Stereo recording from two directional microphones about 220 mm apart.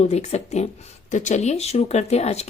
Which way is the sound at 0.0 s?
30° left (ahead or behind).